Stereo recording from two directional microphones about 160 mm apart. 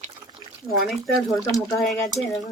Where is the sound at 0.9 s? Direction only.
Centre (ahead or behind).